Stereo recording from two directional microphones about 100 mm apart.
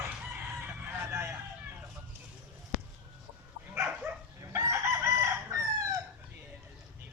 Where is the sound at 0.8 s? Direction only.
25° right (ahead or behind).